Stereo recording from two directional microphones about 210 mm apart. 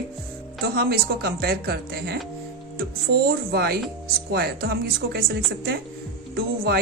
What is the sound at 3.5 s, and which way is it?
Speech, 45° right (ahead or behind).